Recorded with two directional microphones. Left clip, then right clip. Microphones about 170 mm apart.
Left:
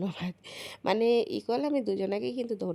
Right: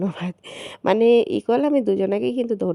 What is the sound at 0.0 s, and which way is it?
A woman's voice, 40° right (ahead or behind).